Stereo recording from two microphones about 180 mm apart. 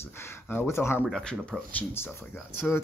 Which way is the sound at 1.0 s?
5° left (ahead or behind).